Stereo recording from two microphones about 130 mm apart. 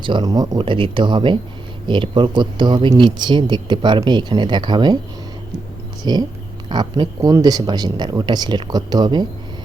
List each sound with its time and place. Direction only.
0.0 s speech: 35° right (ahead or behind)
6.0 s speech: 30° right (ahead or behind)